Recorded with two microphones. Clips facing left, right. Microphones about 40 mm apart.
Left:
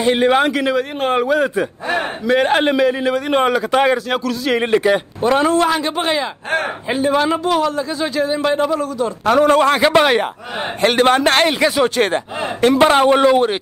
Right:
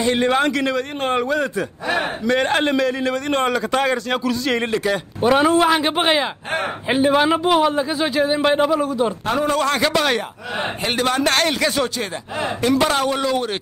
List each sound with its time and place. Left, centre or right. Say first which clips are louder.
0.0 s a man's voice: left 4 dB; centre
4.6 s a man's voice: left 6 dB; left
5.2 s a man's voice: right 1 dB; centre
5.8 s a man's voice: right 1 dB; right
9.3 s a man's voice: left 10 dB; left
9.6 s a man's voice: left 5 dB; left
11.0 s speech: left 4 dB; left
11.4 s a man's voice: left 4 dB; centre
12.4 s speech: left 5 dB; left